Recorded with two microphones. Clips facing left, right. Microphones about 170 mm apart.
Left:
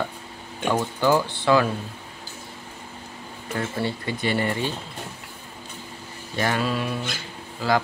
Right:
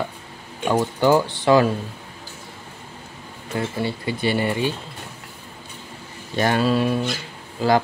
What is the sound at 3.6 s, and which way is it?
Speech, 15° right (ahead or behind).